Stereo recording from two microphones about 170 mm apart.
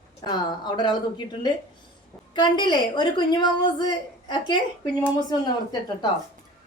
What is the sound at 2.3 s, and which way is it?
A woman's voice, 25° left (ahead or behind).